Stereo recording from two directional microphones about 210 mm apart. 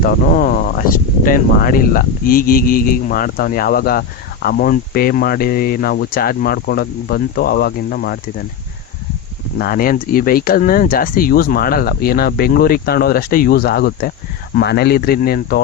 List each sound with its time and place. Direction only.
0.0 s speech: 40° left (ahead or behind)
9.6 s speech: 45° left (ahead or behind)